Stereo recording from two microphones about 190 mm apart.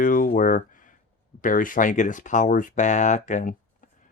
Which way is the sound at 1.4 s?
45° left (ahead or behind).